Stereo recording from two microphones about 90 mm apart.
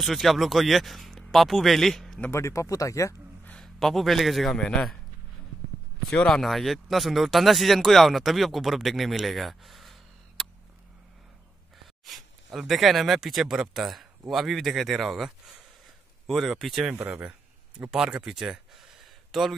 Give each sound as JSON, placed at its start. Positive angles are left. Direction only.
{"t": 0.0, "sound": "speech", "side_deg": 0}
{"t": 2.3, "sound": "speech", "side_deg": 35}
{"t": 3.5, "sound": "a man's voice", "side_deg": 5}
{"t": 6.0, "sound": "speech", "side_deg": 5}
{"t": 12.0, "sound": "speech", "side_deg": 0}
{"t": 16.9, "sound": "speech", "side_deg": -20}
{"t": 17.9, "sound": "a sound", "side_deg": -5}